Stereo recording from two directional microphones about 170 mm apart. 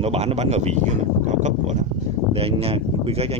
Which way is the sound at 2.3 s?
35° right (ahead or behind).